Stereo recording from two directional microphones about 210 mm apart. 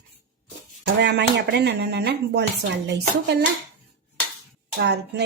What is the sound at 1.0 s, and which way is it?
A woman's voice, 55° right (ahead or behind).